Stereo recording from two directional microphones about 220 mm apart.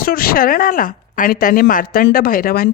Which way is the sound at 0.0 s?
40° left (ahead or behind).